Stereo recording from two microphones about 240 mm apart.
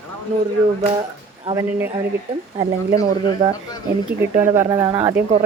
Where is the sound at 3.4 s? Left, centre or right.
Centre.